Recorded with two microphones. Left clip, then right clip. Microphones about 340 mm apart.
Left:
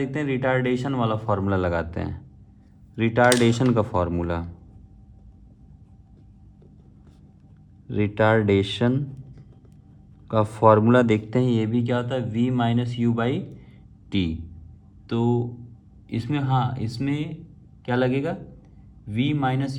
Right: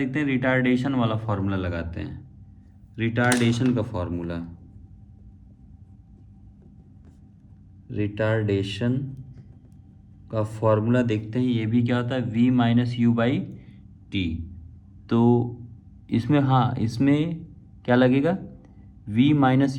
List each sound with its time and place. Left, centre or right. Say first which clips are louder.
0.0 s speech: even; centre
7.9 s speech: left 5 dB; centre
10.2 s speech: left 6 dB; centre
15.0 s speech: right 3 dB; centre